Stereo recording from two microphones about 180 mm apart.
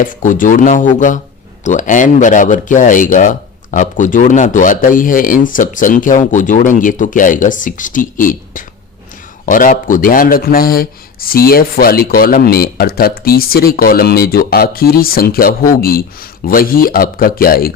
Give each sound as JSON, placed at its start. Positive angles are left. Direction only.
{"t": 0.0, "sound": "a man's voice", "side_deg": 45}